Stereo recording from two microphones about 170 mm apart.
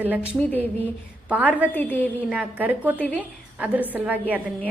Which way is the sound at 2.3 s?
10° right (ahead or behind).